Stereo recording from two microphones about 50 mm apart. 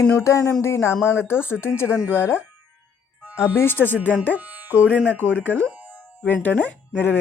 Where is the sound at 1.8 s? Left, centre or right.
Right.